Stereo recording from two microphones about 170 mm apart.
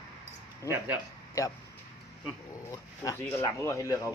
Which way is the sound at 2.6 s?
15° left (ahead or behind).